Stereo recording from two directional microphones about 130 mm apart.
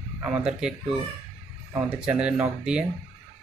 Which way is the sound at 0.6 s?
5° right (ahead or behind).